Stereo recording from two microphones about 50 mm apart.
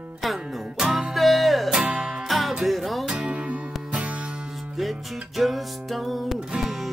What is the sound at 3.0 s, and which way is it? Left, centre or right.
Music, right.